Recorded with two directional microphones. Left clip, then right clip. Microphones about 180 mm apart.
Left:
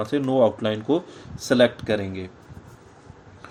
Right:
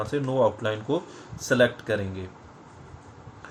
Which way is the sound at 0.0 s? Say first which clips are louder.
Left 4 dB; 50° left (ahead or behind).